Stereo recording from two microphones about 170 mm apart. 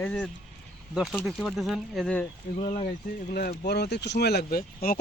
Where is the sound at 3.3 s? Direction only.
65° left (ahead or behind).